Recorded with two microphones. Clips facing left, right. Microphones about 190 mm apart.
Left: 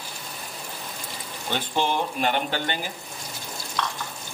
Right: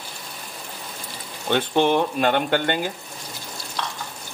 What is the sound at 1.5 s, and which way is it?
Speech, 60° right (ahead or behind).